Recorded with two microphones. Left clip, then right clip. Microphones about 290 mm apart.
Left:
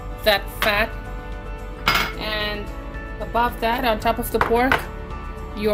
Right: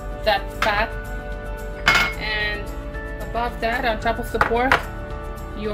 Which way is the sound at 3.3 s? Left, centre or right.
Left.